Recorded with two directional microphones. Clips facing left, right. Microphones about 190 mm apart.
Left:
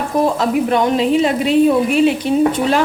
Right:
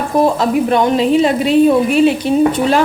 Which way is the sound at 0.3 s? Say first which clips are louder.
Right 2 dB; 35° right (ahead or behind).